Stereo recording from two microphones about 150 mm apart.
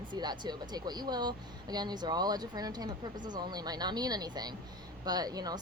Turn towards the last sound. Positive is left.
turn(degrees=-25)  # may be behind; listen again after turning